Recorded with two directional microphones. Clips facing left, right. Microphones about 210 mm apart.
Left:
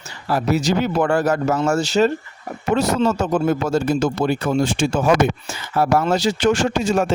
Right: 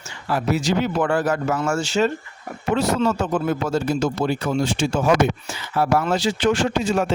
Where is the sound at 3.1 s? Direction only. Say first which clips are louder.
Left 3 dB; 45° left (ahead or behind).